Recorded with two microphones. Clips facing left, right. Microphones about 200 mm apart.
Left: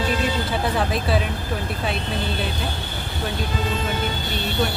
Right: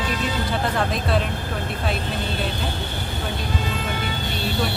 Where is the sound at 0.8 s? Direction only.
5° left (ahead or behind).